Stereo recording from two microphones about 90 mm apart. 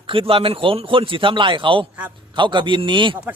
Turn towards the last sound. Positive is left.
turn(degrees=-65)  # may be behind; listen again after turning